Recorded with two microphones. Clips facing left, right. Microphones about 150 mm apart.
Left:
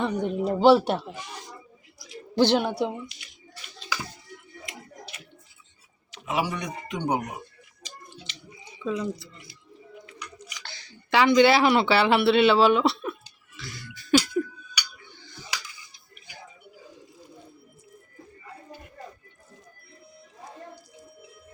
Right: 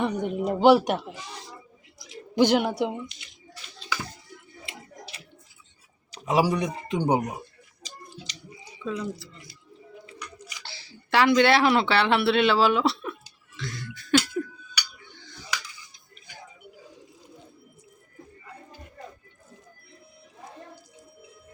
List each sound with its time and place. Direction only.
0.0 s speech: 15° right (ahead or behind)
2.0 s a sound: 15° right (ahead or behind)
2.7 s speech: 20° right (ahead or behind)
6.1 s speech: 40° right (ahead or behind)
7.8 s a sound: 35° right (ahead or behind)
8.8 s speech: centre (ahead or behind)
10.6 s chewing: 30° right (ahead or behind)
11.1 s speech: centre (ahead or behind)
13.6 s beatboxing: centre (ahead or behind)
13.9 s a sound: centre (ahead or behind)